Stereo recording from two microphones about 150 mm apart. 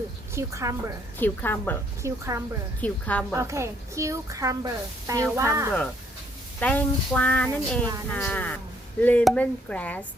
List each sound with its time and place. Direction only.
0.3 s a woman's voice: 20° right (ahead or behind)
1.2 s speech: 15° left (ahead or behind)
2.0 s a woman's voice: 20° right (ahead or behind)
2.8 s speech: 10° left (ahead or behind)
3.3 s a woman's voice: 20° right (ahead or behind)
6.6 s speech: 10° left (ahead or behind)